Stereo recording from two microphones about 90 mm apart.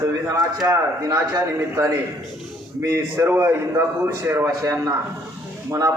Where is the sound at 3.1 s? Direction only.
25° right (ahead or behind).